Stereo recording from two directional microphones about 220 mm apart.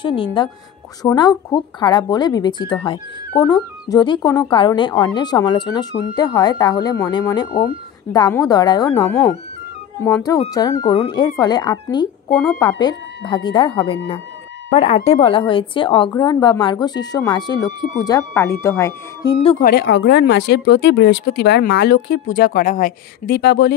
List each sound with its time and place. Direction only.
0.0 s speech: 25° left (ahead or behind)
19.6 s speech: 45° left (ahead or behind)